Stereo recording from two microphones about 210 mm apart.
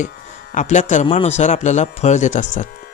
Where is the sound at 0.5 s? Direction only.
35° left (ahead or behind).